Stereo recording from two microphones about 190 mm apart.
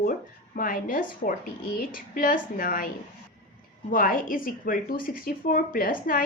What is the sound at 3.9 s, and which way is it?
Speech, 45° left (ahead or behind).